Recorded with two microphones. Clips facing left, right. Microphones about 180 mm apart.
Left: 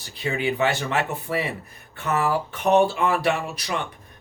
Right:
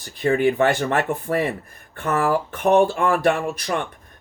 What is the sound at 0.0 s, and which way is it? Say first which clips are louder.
Speech: right 7 dB; 50° right (ahead or behind).